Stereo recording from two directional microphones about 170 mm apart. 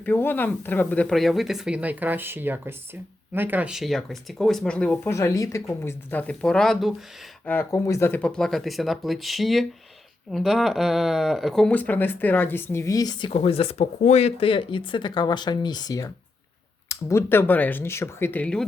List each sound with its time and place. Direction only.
0.0 s speech: 10° left (ahead or behind)
5.1 s speech: 20° left (ahead or behind); by 6.9 s centre (ahead or behind)
7.4 s speech: 15° left (ahead or behind)